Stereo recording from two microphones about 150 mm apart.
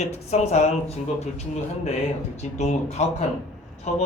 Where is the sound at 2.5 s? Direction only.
45° left (ahead or behind).